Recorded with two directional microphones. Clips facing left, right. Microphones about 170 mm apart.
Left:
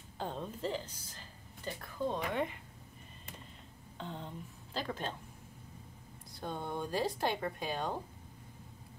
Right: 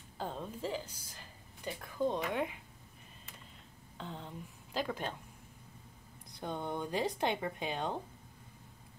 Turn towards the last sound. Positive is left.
turn(degrees=-20)  # may be behind; listen again after turning